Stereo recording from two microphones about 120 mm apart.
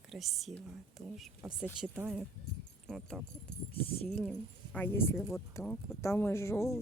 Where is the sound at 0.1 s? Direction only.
Centre (ahead or behind).